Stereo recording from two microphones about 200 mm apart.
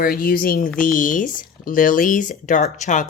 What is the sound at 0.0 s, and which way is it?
A woman's voice, 45° left (ahead or behind).